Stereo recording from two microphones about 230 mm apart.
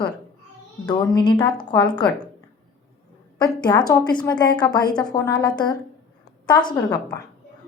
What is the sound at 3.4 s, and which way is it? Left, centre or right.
A woman's voice, centre.